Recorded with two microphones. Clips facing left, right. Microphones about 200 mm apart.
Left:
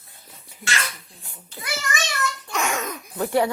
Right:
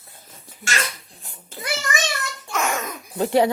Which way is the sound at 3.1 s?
20° right (ahead or behind).